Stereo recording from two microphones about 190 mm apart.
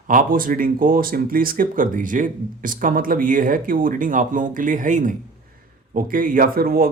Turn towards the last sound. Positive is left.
turn(degrees=-50)  # may be behind; listen again after turning